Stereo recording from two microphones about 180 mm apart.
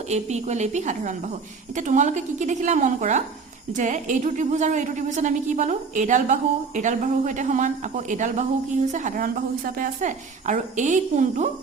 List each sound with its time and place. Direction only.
0.1 s a woman's voice: 40° right (ahead or behind)